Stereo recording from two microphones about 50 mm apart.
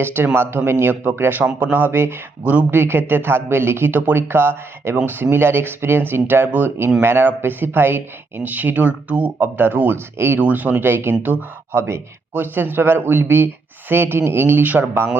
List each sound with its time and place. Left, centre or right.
0.0 s speech: right
2.4 s speech: right
2.6 s speech: right
7.0 s speech: right
7.3 s speech: right
9.6 s speech: right
10.2 s speech: right
10.4 s speech: right
11.7 s speech: right
12.3 s speech: right
14.6 s speech: right